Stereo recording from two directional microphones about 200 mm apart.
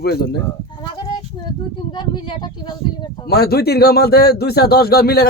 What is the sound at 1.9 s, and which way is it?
Speech, 25° left (ahead or behind).